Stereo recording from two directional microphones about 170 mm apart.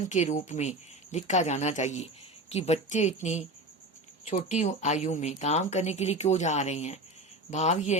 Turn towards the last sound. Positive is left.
turn(degrees=45)  # may be behind; listen again after turning